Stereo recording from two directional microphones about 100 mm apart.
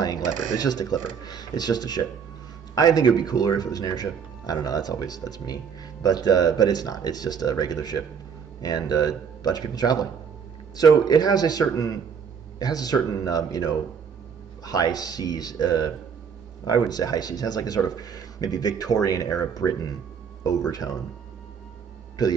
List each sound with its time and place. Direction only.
0.0 s speech: 40° left (ahead or behind)